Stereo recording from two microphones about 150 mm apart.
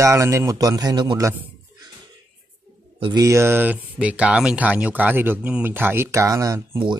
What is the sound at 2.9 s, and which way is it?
Speech, 35° right (ahead or behind).